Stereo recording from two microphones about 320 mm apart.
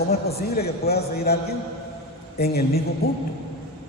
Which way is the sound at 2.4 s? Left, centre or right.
Left.